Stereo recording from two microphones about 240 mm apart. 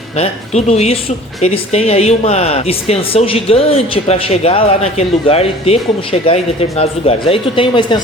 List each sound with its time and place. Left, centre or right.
0.2 s speech: left